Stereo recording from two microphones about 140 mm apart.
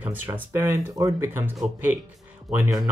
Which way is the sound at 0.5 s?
20° right (ahead or behind).